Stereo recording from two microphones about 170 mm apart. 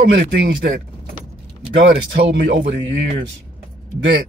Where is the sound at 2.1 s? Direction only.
80° right.